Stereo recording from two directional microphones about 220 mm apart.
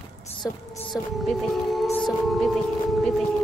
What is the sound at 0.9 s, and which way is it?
A woman's voice, centre (ahead or behind).